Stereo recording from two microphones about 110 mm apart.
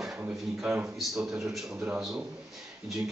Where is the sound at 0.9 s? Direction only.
Centre (ahead or behind).